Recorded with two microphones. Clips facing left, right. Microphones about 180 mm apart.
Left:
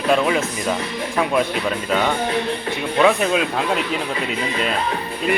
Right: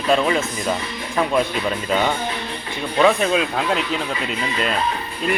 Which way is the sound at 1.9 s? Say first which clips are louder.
Left 2 dB; centre (ahead or behind).